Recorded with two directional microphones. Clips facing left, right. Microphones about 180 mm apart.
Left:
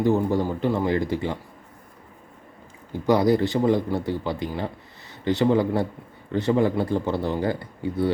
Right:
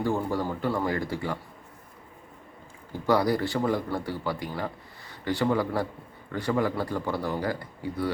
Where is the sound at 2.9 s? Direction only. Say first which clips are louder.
Left 5 dB; 20° left (ahead or behind).